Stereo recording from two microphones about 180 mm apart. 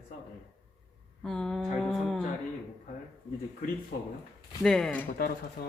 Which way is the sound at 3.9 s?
60° left (ahead or behind).